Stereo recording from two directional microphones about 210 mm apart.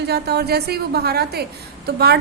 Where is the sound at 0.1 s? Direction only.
50° right (ahead or behind).